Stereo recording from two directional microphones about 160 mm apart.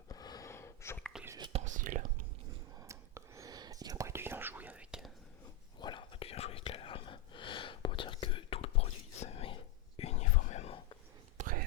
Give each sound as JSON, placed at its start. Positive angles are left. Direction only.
{"t": 0.1, "sound": "a sound", "side_deg": 25}
{"t": 1.1, "sound": "whispering", "side_deg": -5}
{"t": 1.5, "sound": "whispering", "side_deg": -50}
{"t": 2.7, "sound": "whispering", "side_deg": -20}
{"t": 5.8, "sound": "whispering", "side_deg": 30}
{"t": 11.3, "sound": "a sound", "side_deg": -60}